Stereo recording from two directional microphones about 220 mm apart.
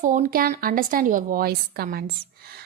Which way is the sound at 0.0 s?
35° right (ahead or behind).